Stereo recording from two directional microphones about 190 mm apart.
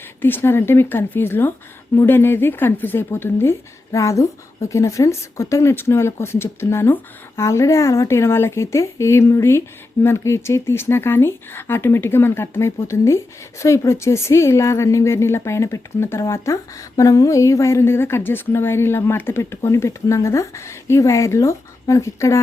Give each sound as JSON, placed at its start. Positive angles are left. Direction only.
{"t": 0.2, "sound": "speech", "side_deg": 10}